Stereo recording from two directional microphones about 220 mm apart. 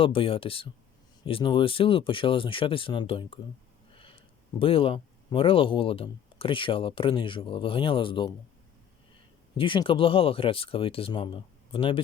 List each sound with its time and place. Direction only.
0.0 s speech: 25° left (ahead or behind)
3.9 s sniff: 25° left (ahead or behind)
4.6 s speech: 25° left (ahead or behind)
9.6 s speech: 20° left (ahead or behind)